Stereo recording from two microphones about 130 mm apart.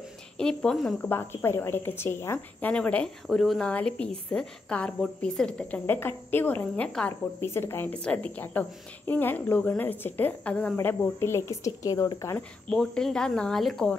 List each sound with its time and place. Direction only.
0.4 s a woman's voice: 5° left (ahead or behind)
1.0 s a woman's voice: 15° left (ahead or behind)
7.3 s a woman's voice: 20° left (ahead or behind)
12.6 s speech: 5° left (ahead or behind)